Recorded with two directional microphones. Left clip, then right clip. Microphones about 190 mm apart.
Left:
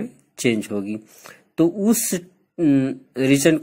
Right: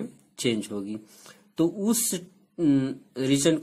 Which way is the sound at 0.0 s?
20° left (ahead or behind).